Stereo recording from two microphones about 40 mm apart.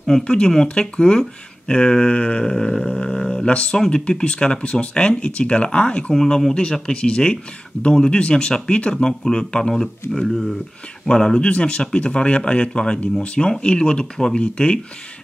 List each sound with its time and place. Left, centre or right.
0.7 s speech: left
2.4 s speech: centre
2.8 s a sound: left
3.4 s speech: left
3.7 s speech: centre
6.1 s speech: centre
10.1 s speech: centre
11.1 s speech: centre